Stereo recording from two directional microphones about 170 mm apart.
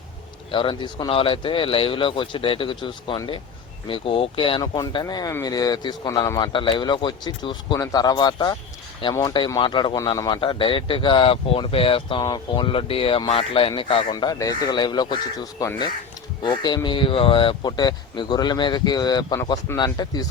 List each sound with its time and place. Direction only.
0.5 s a man's voice: 30° left (ahead or behind)